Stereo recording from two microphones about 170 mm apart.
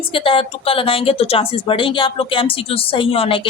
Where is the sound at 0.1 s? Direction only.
30° left (ahead or behind).